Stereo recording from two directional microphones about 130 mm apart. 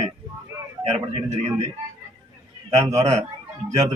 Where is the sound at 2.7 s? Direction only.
55° right (ahead or behind).